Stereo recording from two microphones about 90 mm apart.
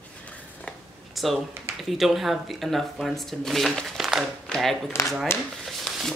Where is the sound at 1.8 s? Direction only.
Centre (ahead or behind).